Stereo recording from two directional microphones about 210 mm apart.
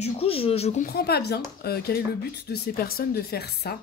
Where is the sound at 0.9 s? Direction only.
50° left (ahead or behind).